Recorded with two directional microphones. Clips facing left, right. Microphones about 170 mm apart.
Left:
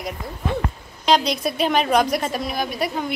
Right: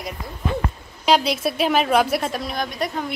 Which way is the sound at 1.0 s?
5° right (ahead or behind).